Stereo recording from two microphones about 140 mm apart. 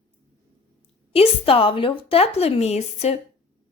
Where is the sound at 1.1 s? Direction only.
45° left (ahead or behind).